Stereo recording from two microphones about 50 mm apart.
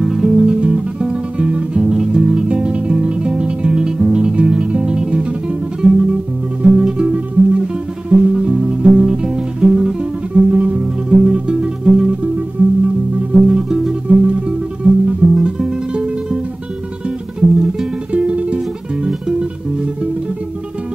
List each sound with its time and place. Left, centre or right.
0.0 s music: centre
0.5 s music: right
10.5 s music: right
10.8 s music: centre
12.6 s music: right
13.3 s music: centre
14.0 s music: right
17.4 s music: centre
18.1 s music: right